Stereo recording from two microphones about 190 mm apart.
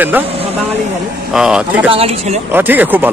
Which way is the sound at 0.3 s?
30° right (ahead or behind).